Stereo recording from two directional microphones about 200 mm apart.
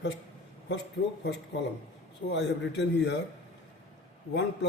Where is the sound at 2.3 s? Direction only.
60° left (ahead or behind).